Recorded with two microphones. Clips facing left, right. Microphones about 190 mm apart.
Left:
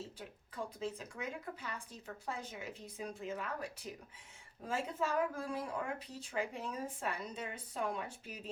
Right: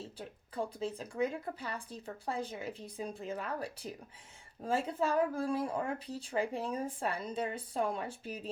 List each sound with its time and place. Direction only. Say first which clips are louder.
0.2 s speech: right 6 dB; 30° right (ahead or behind)